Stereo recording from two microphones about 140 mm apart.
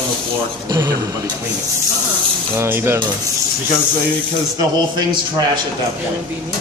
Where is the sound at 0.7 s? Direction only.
30° right (ahead or behind).